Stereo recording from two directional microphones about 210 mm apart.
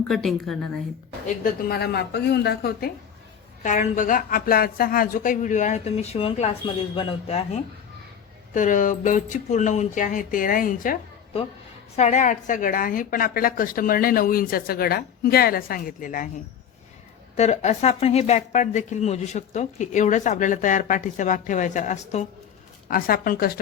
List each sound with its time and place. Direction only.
0.1 s a woman's voice: centre (ahead or behind)
1.6 s a woman's voice: 50° left (ahead or behind)
3.6 s speech: 35° left (ahead or behind)
11.9 s a woman's voice: 35° left (ahead or behind)
17.3 s a woman's voice: 30° left (ahead or behind)